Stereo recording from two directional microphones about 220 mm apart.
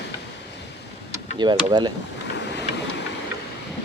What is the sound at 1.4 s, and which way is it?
Speech, 20° right (ahead or behind).